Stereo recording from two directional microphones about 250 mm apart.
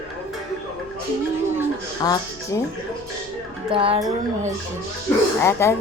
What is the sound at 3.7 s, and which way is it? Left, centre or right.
Speech, right.